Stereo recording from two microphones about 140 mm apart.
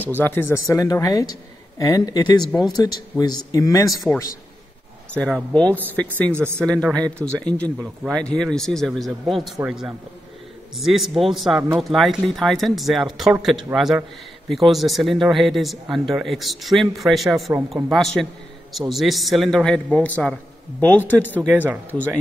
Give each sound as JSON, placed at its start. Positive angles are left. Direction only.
{"t": 0.2, "sound": "a man's voice", "side_deg": 15}
{"t": 3.9, "sound": "speech", "side_deg": 0}
{"t": 21.5, "sound": "speech", "side_deg": -10}